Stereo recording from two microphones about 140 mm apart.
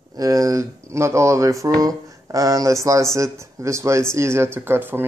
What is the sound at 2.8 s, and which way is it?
Speech, 20° right (ahead or behind).